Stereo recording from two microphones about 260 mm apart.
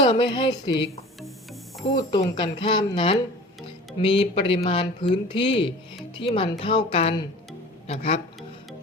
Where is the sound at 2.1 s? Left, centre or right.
Centre.